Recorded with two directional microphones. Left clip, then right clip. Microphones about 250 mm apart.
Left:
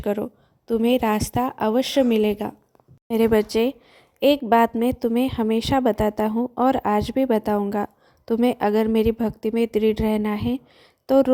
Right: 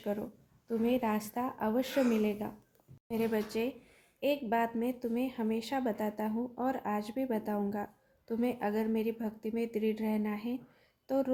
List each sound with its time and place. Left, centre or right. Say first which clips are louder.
0.0 s a woman's voice: left 12 dB; left